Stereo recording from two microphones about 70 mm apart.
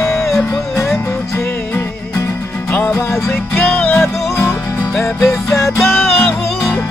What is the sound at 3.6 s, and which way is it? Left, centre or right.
Music, centre.